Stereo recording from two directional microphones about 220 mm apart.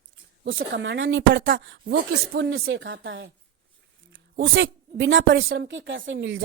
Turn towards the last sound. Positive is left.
turn(degrees=-60)  # may be behind; listen again after turning